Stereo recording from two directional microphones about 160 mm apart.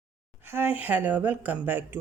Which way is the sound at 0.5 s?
10° right (ahead or behind).